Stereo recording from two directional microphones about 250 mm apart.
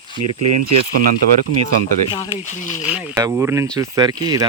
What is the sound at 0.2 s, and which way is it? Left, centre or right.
Speech, right.